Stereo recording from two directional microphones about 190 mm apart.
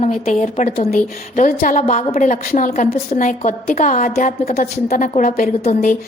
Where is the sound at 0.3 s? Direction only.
40° left (ahead or behind).